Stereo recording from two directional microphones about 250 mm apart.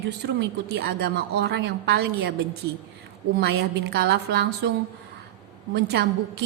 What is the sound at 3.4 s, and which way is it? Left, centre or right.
A woman's voice, right.